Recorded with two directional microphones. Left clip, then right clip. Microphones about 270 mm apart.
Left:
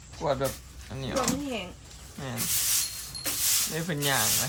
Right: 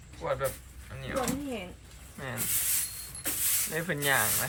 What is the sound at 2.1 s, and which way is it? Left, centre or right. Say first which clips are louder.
Sanding: left 1 dB; centre.